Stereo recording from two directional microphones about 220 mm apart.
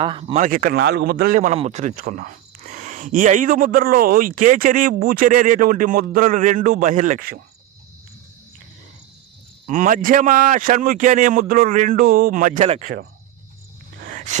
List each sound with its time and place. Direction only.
0.0 s speech: 25° right (ahead or behind)
0.4 s speech: 40° right (ahead or behind)
9.6 s speech: 35° right (ahead or behind)
14.0 s a sound: 35° right (ahead or behind)